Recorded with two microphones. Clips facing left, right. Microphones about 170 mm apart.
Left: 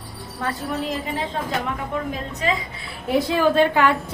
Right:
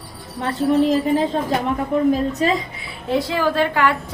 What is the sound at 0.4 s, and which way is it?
A woman's voice, 35° right (ahead or behind).